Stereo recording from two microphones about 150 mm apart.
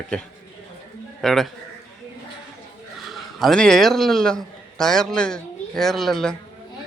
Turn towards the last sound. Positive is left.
turn(degrees=0)  # may be behind; listen again after turning